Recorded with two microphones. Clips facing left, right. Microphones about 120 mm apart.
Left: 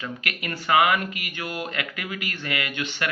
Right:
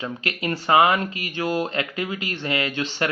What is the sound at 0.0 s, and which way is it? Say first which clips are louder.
Speech: right 5 dB; 30° right (ahead or behind).